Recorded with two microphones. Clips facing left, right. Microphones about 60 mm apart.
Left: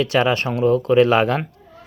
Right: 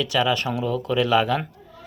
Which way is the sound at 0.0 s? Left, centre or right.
Left.